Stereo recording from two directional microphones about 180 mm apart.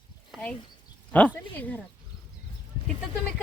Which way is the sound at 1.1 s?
10° left (ahead or behind).